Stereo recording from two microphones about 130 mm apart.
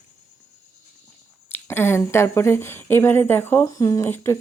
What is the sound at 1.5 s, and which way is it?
Speech, 15° left (ahead or behind).